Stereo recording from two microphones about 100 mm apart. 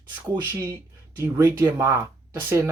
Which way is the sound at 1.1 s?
20° right (ahead or behind).